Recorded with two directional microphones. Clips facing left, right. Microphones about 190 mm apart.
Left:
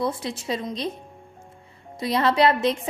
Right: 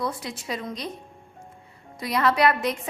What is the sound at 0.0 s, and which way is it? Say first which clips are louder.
Speech: left 4 dB; 25° left (ahead or behind).